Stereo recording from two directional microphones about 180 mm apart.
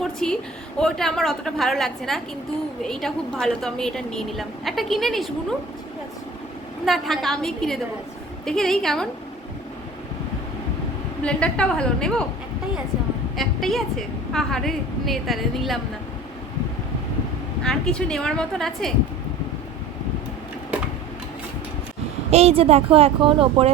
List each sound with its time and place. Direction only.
0.0 s a sound: 5° left (ahead or behind)
0.8 s a woman's voice: 5° left (ahead or behind)
6.8 s a woman's voice: centre (ahead or behind)
11.2 s a woman's voice: 5° left (ahead or behind)
13.3 s a woman's voice: centre (ahead or behind)
17.6 s a woman's voice: 5° left (ahead or behind)
22.3 s speech: 35° right (ahead or behind)